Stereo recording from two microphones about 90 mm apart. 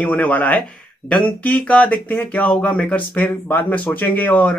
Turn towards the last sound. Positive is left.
turn(degrees=15)  # may be behind; listen again after turning